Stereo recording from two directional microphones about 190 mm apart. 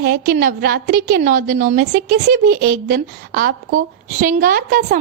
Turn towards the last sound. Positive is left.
turn(degrees=-45)  # may be behind; listen again after turning